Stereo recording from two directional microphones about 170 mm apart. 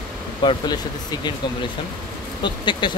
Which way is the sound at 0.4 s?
30° left (ahead or behind).